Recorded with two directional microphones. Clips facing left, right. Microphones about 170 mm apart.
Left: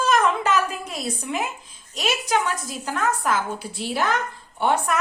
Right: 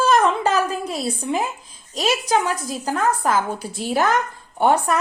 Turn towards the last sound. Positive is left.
turn(degrees=-40)  # may be behind; listen again after turning